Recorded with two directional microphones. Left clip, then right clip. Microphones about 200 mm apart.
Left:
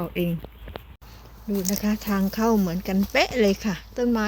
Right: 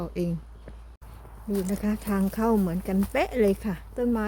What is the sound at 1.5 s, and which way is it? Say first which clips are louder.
Speech: left 2 dB; 5° right (ahead or behind).